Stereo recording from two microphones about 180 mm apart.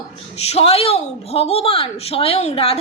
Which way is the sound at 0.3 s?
35° left (ahead or behind).